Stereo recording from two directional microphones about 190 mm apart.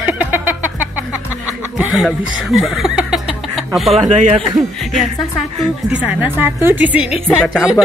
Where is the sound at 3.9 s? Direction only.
30° right (ahead or behind).